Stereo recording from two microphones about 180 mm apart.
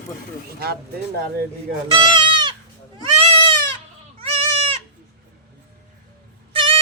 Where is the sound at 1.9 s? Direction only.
25° right (ahead or behind).